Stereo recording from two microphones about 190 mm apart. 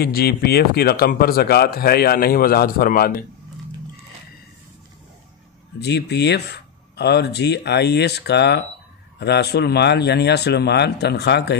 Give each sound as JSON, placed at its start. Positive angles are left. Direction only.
{"t": 0.0, "sound": "a man's voice", "side_deg": 55}
{"t": 5.8, "sound": "a man's voice", "side_deg": 60}